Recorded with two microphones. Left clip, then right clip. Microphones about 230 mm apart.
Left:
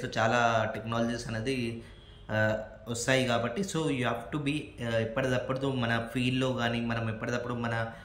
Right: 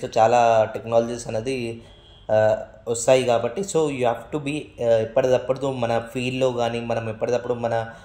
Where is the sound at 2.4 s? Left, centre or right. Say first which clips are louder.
Right 11 dB; left.